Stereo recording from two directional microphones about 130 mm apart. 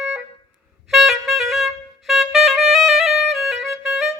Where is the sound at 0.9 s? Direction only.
Centre (ahead or behind).